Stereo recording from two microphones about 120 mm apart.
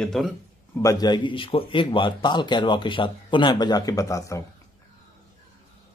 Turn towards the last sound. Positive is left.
turn(degrees=25)  # may be behind; listen again after turning